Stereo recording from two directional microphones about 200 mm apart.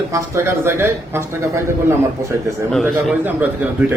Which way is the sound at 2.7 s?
Centre (ahead or behind).